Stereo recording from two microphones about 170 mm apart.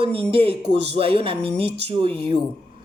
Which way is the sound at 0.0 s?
35° right (ahead or behind).